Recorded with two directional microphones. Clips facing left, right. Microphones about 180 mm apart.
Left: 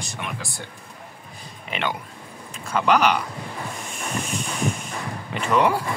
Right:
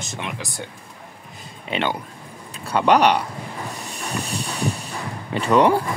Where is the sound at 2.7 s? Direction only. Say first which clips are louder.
Right 3 dB; 35° right (ahead or behind).